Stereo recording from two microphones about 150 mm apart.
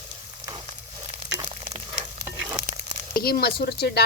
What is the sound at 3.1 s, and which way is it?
Speech, 90° left.